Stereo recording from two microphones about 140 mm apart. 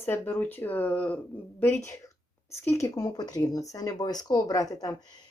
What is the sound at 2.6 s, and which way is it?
Speech, 20° left (ahead or behind).